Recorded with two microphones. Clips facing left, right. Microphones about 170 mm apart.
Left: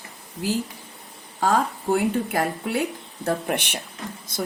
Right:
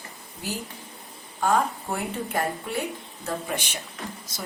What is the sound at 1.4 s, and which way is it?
A woman's voice, 90° left.